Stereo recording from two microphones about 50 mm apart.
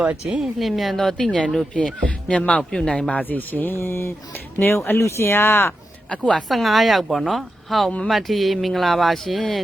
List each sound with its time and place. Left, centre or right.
0.3 s speech: centre
0.6 s a woman's voice: centre; by 3.2 s left
3.2 s speech: left
3.8 s speech: left
6.1 s speech: left
6.5 s a woman's voice: centre